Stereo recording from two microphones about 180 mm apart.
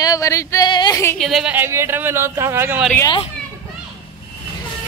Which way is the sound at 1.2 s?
Centre (ahead or behind).